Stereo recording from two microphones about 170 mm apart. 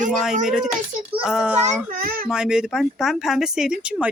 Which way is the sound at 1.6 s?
55° right (ahead or behind).